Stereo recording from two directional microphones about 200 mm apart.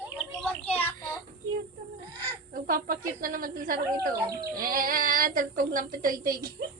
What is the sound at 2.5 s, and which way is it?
Speech, 45° right (ahead or behind).